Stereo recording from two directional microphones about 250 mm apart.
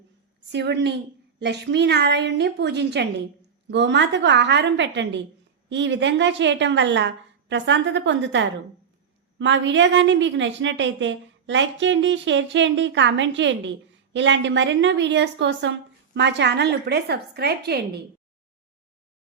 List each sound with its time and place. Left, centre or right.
0.5 s a woman's voice: right